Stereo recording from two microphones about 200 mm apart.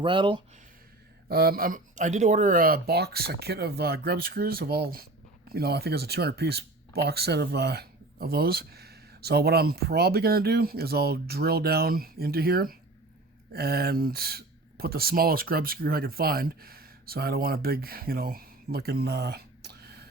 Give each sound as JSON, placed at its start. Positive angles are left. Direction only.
{"t": 0.0, "sound": "speech", "side_deg": -25}
{"t": 1.3, "sound": "speech", "side_deg": -50}